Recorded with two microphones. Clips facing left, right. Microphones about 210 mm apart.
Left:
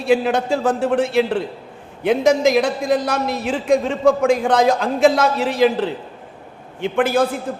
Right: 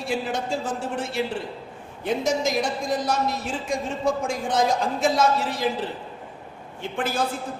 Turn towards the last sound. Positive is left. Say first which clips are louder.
# left 8 dB
turn(degrees=55)  # may be behind; listen again after turning